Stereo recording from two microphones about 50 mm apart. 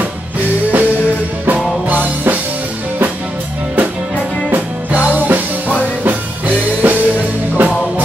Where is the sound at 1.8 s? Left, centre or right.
Right.